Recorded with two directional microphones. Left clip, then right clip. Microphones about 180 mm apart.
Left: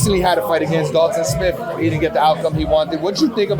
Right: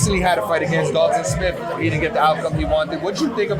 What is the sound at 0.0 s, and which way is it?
Speech, 55° left (ahead or behind).